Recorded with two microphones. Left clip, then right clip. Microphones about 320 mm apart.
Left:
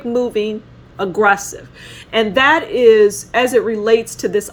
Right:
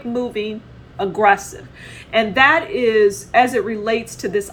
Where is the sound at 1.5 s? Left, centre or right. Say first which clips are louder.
Left 3 dB; left.